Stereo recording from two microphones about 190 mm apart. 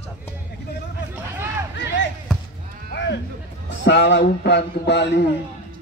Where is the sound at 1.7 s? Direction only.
70° left (ahead or behind).